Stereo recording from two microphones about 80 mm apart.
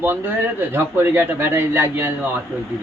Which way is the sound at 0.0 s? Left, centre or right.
Right.